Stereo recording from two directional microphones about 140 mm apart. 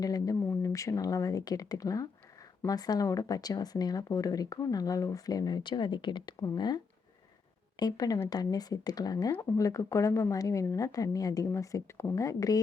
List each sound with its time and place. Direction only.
0.0 s speech: 25° left (ahead or behind)